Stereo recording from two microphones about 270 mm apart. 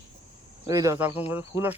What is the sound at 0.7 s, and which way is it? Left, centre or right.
Speech, centre.